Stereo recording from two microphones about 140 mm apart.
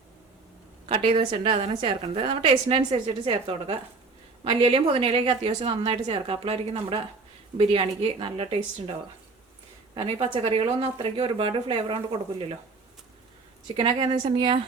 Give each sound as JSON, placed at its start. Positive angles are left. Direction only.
{"t": 0.9, "sound": "a woman's voice", "side_deg": -40}
{"t": 9.9, "sound": "a woman's voice", "side_deg": -40}
{"t": 13.7, "sound": "a woman's voice", "side_deg": -40}